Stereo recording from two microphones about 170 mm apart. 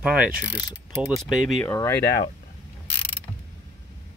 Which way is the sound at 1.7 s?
15° left (ahead or behind).